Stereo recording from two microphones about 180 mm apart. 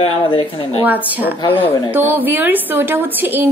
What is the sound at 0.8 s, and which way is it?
Speech, 10° right (ahead or behind).